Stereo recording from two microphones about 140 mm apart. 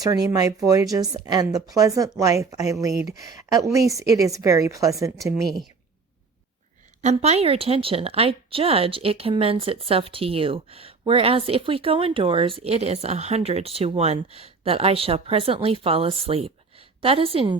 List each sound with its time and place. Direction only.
0.0 s a woman's voice: 25° right (ahead or behind)
7.0 s a woman's voice: 50° right (ahead or behind)